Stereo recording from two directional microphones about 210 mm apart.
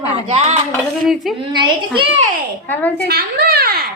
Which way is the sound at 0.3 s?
30° right (ahead or behind).